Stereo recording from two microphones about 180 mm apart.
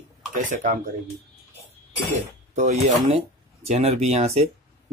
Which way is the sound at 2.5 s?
40° right (ahead or behind).